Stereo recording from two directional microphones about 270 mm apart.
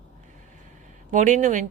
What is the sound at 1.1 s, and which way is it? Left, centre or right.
Speech, right.